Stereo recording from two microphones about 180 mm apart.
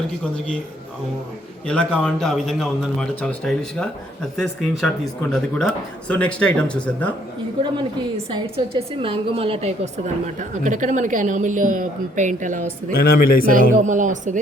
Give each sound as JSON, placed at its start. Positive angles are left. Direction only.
{"t": 1.6, "sound": "a man's voice", "side_deg": 5}
{"t": 8.3, "sound": "a woman's voice", "side_deg": -30}
{"t": 13.0, "sound": "speech", "side_deg": 55}
{"t": 13.5, "sound": "a woman's voice", "side_deg": -45}